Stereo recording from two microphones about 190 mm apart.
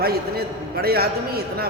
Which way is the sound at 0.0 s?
55° right (ahead or behind).